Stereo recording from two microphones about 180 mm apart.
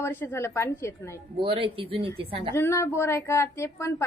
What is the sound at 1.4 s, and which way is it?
Speech, 30° right (ahead or behind).